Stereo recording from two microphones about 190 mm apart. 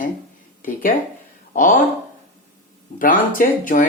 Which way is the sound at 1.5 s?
45° left (ahead or behind).